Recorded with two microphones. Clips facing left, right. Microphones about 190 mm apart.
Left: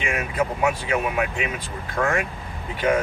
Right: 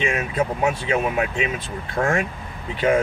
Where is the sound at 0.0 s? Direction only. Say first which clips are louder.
Right 2 dB; 25° right (ahead or behind).